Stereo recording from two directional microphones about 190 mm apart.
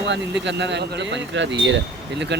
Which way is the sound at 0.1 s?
70° right (ahead or behind).